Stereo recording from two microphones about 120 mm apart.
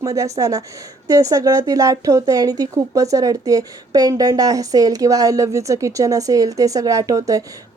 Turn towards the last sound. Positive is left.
turn(degrees=-30)  # may be behind; listen again after turning